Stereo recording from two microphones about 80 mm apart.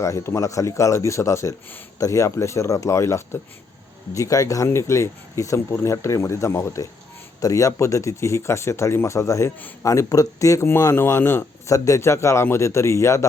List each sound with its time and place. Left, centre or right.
0.0 s speech: left
11.7 s speech: left